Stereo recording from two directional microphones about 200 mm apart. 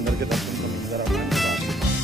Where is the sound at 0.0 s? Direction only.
Centre (ahead or behind).